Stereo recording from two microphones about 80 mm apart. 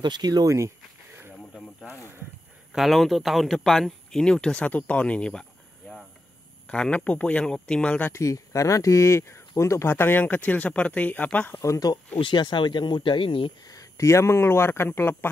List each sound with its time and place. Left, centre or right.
0.0 s speech: right
0.6 s a sound: right
2.7 s speech: centre
6.7 s speech: centre
8.1 s speech: left
11.6 s speech: left
12.2 s speech: left
13.7 s speech: left